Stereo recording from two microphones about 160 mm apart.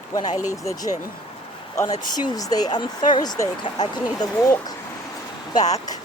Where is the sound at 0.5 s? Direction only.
20° left (ahead or behind).